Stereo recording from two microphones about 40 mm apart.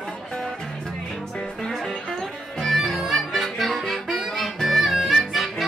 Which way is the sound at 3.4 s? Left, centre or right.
Centre.